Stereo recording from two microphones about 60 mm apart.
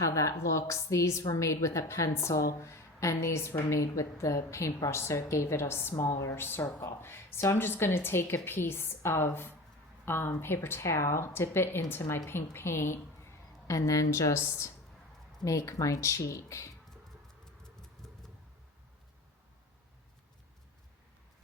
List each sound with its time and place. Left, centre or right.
0.0 s a woman's voice: left
13.7 s a woman's voice: left
15.4 s a woman's voice: left
18.0 s a sound: centre